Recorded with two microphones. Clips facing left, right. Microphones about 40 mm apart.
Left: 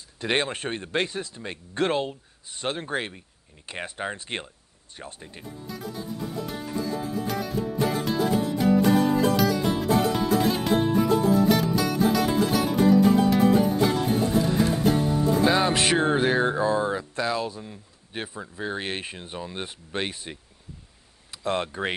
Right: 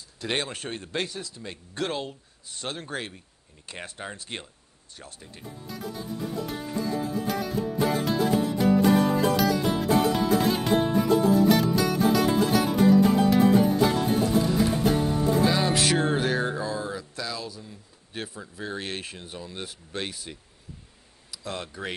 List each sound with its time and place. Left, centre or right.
0.2 s speech: left
5.7 s music: centre
15.4 s music: left
18.2 s speech: left